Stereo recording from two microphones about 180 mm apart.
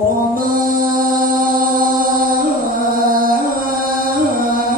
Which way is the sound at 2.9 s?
50° right (ahead or behind).